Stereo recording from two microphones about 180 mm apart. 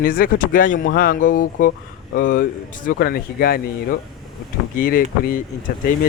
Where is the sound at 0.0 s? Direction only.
50° left (ahead or behind).